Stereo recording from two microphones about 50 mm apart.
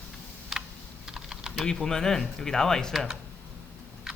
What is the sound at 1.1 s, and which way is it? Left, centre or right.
Typing, centre.